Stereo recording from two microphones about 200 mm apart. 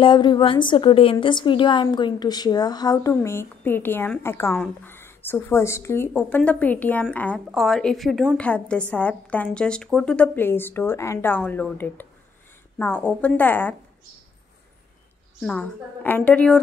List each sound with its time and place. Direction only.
0.0 s a woman's voice: 25° left (ahead or behind)
15.4 s a woman's voice: 5° left (ahead or behind)